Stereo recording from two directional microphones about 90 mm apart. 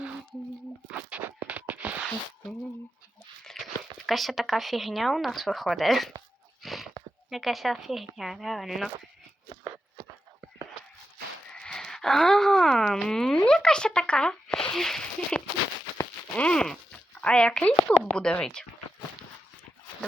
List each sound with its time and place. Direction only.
0.9 s a sound: 15° right (ahead or behind)
3.4 s speech: centre (ahead or behind)
6.6 s a sound: centre (ahead or behind)
7.3 s speech: centre (ahead or behind)
11.5 s wail: 10° left (ahead or behind)
16.3 s speech: 10° left (ahead or behind)